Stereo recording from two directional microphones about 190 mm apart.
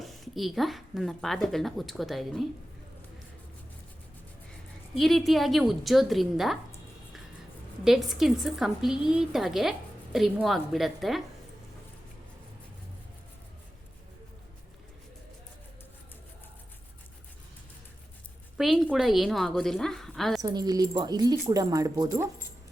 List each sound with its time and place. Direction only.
0.0 s speech: centre (ahead or behind)
4.9 s speech: centre (ahead or behind)
7.9 s speech: centre (ahead or behind)
18.5 s speech: centre (ahead or behind)
20.4 s speech: 20° right (ahead or behind)